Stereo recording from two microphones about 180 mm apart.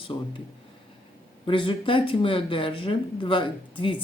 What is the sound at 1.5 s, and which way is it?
Speech, 30° left (ahead or behind).